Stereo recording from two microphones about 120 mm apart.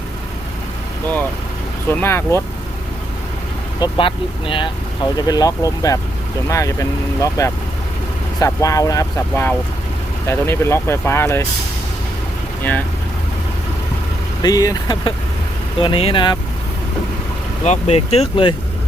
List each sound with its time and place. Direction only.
1.9 s speech: 20° left (ahead or behind)
3.8 s speech: 45° left (ahead or behind)
5.1 s speech: 35° left (ahead or behind)
14.4 s speech: 30° left (ahead or behind)
15.8 s speech: 50° left (ahead or behind)
17.6 s speech: 70° left (ahead or behind); by 18.5 s 50° left (ahead or behind)